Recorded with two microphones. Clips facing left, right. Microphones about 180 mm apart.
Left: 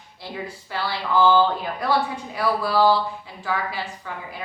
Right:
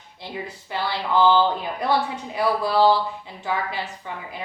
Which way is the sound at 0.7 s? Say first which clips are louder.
Right 1 dB; 20° right (ahead or behind).